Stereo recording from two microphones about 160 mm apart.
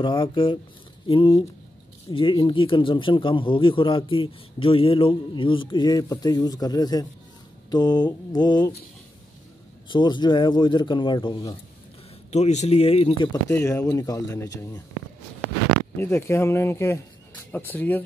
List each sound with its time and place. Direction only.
0.0 s speech: 30° left (ahead or behind)
9.8 s speech: 30° left (ahead or behind)
12.3 s speech: 45° left (ahead or behind)
13.5 s speech: 15° left (ahead or behind)
16.0 s speech: 15° left (ahead or behind)